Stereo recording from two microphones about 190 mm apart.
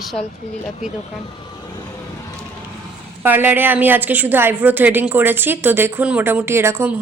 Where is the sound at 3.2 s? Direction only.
10° right (ahead or behind).